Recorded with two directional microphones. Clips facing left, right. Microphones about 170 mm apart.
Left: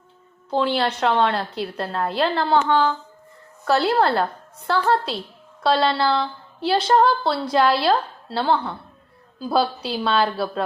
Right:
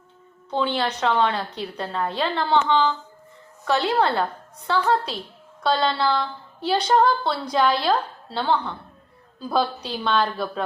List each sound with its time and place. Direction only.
0.5 s a woman's voice: centre (ahead or behind)
6.1 s a sound: 30° left (ahead or behind)
6.7 s a woman's voice: centre (ahead or behind)